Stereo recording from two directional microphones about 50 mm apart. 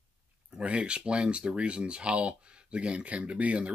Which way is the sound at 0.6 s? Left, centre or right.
Right.